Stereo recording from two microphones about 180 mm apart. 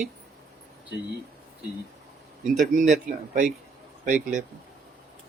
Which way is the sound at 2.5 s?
45° right (ahead or behind).